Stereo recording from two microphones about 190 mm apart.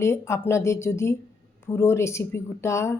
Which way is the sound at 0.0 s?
15° left (ahead or behind).